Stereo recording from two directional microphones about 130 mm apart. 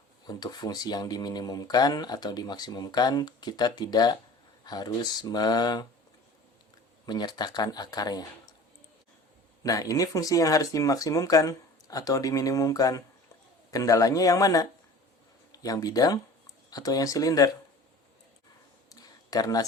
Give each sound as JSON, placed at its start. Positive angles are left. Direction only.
{"t": 0.3, "sound": "speech", "side_deg": 30}
{"t": 7.0, "sound": "speech", "side_deg": 35}
{"t": 9.6, "sound": "speech", "side_deg": 25}
{"t": 18.9, "sound": "a sound", "side_deg": 30}